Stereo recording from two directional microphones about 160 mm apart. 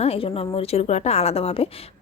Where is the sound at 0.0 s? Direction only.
35° left (ahead or behind).